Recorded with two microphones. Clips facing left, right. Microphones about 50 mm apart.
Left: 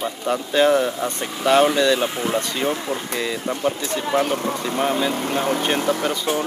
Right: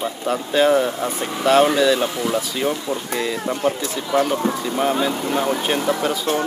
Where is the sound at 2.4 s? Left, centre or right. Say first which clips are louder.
Even; centre.